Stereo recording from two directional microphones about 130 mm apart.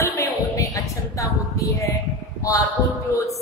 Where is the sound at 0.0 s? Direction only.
25° left (ahead or behind).